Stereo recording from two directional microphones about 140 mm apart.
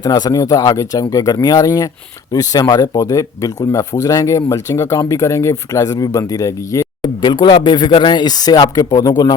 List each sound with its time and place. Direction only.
0.0 s speech: 30° left (ahead or behind)
7.2 s speech: 35° left (ahead or behind)